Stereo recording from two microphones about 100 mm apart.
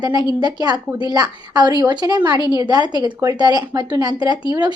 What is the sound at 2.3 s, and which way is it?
Speech, 45° left (ahead or behind).